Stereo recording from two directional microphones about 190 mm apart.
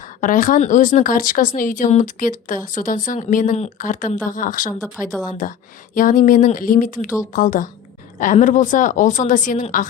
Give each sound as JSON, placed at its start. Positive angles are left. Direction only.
{"t": 0.0, "sound": "speech", "side_deg": 45}